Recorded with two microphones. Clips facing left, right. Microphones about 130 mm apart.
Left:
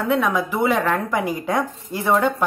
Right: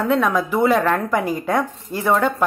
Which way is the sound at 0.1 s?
15° left (ahead or behind).